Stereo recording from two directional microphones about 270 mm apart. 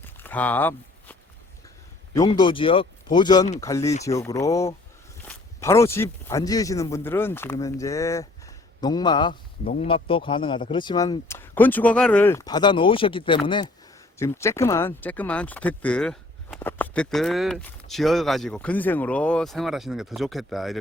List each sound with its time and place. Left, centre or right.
0.0 s walk: centre
2.1 s a man's voice: centre